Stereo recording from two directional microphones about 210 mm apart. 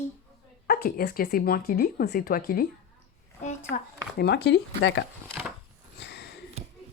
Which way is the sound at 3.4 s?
35° left (ahead or behind).